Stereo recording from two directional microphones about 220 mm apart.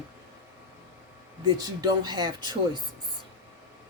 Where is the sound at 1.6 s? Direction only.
20° right (ahead or behind).